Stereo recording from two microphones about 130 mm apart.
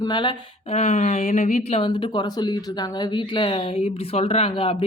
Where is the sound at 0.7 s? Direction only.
65° left (ahead or behind).